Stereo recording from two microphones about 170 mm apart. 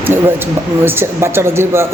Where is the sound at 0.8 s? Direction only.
15° right (ahead or behind).